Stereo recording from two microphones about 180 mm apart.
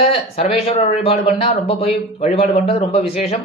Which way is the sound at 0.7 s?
35° left (ahead or behind).